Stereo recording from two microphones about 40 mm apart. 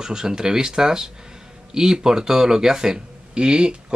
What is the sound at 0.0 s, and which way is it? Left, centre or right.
Speech, centre.